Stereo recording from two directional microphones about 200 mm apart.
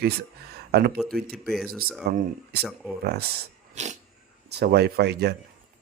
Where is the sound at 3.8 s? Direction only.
35° right (ahead or behind).